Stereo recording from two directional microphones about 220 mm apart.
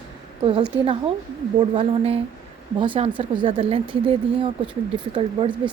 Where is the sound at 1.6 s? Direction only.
25° right (ahead or behind).